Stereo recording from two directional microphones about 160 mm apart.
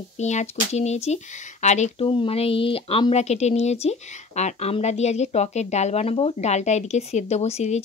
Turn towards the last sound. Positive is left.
turn(degrees=40)  # may be behind; listen again after turning